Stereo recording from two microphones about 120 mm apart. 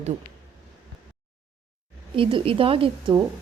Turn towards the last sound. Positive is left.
turn(degrees=-50)  # may be behind; listen again after turning